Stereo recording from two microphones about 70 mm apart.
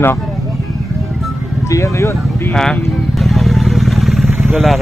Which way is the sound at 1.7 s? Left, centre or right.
Left.